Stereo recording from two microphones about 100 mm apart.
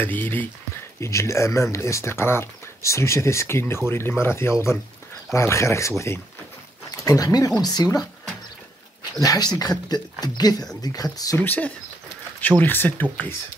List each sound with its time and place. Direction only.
0.0 s speech: 20° left (ahead or behind)
1.0 s speech: 30° left (ahead or behind)
9.2 s speech: 35° left (ahead or behind)
11.3 s speech: 20° left (ahead or behind)